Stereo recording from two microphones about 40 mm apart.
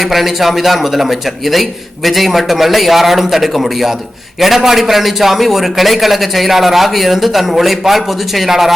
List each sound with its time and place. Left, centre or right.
0.0 s a man's voice: centre